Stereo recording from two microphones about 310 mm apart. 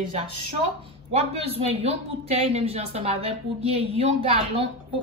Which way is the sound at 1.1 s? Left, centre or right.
Centre.